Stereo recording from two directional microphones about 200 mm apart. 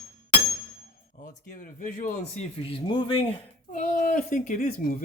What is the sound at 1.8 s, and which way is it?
Speech, 35° left (ahead or behind).